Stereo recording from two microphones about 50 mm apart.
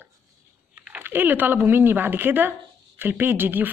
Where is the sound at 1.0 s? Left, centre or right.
Right.